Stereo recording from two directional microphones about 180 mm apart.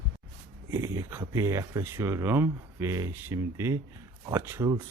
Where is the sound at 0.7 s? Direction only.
15° right (ahead or behind).